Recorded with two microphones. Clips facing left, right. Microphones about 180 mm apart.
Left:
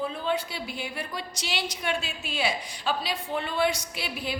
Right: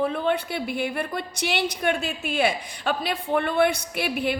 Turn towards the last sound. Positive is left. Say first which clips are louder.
# right 7 dB
turn(degrees=-60)  # may be behind; listen again after turning